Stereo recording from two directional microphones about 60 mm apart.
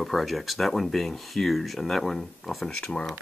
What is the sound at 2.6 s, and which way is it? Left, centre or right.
Speech, centre.